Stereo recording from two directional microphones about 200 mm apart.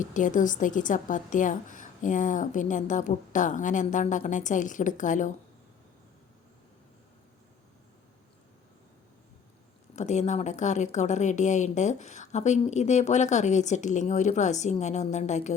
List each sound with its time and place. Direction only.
0.0 s speech: 40° left (ahead or behind)
9.9 s speech: 35° left (ahead or behind)